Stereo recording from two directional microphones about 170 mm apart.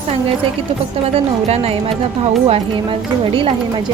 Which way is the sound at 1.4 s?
35° right (ahead or behind).